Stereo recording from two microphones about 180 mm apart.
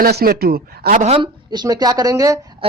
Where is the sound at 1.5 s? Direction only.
25° right (ahead or behind).